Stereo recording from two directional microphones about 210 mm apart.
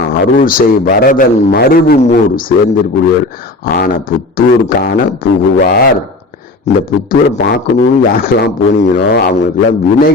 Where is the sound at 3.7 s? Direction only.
45° left (ahead or behind).